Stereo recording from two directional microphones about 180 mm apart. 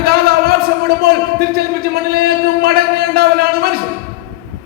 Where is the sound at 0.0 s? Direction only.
60° right (ahead or behind).